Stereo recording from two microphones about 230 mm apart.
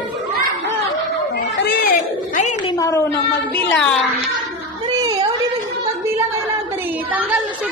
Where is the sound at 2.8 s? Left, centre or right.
Centre.